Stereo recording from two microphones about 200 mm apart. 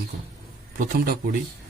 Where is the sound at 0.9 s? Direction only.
50° right (ahead or behind).